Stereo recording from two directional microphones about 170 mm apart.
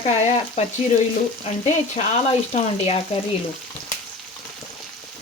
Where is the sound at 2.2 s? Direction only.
35° left (ahead or behind).